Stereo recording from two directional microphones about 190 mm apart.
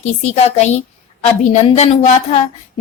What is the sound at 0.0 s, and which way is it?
A woman's voice, 35° left (ahead or behind).